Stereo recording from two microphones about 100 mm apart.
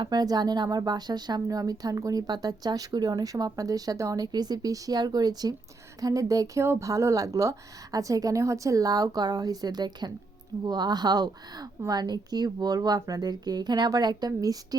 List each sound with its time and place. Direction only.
0.0 s a woman's voice: 40° right (ahead or behind)